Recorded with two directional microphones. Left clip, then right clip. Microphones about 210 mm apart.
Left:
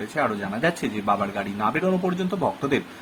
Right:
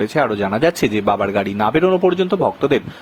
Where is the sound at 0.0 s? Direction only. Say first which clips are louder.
Right 8 dB; 40° right (ahead or behind).